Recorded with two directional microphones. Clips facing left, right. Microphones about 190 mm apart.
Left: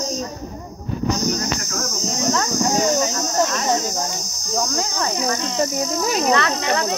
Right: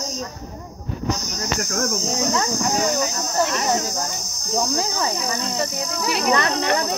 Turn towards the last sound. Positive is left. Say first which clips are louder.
# left 2 dB
turn(degrees=45)  # may be behind; listen again after turning